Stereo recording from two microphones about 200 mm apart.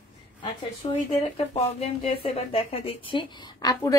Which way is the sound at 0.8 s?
25° left (ahead or behind).